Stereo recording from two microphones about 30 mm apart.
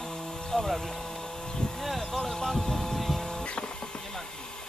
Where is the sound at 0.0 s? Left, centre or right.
Left.